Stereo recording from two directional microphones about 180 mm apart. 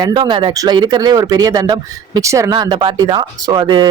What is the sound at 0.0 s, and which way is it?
Speech, 25° right (ahead or behind).